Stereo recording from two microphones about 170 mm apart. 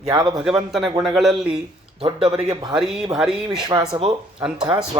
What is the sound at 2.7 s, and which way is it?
Speech, 5° right (ahead or behind).